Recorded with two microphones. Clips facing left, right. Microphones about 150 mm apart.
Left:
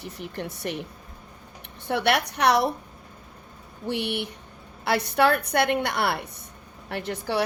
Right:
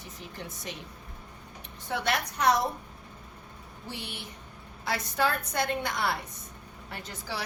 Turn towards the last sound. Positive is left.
turn(degrees=65)  # may be behind; listen again after turning